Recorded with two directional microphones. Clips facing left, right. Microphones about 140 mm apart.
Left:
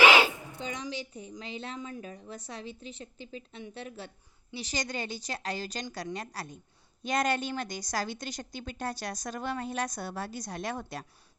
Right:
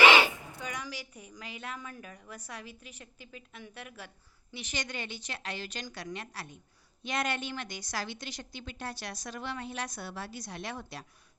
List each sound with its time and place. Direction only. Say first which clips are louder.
0.6 s a woman's voice: left 4 dB; 25° left (ahead or behind); by 11.0 s 45° left (ahead or behind)